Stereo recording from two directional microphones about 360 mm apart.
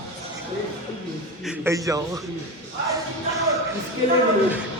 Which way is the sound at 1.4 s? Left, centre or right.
Centre.